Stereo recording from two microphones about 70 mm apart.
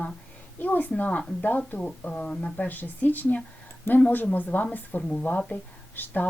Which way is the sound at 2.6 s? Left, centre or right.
Left.